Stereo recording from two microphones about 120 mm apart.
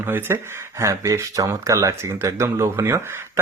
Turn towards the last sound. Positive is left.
turn(degrees=-20)  # may be behind; listen again after turning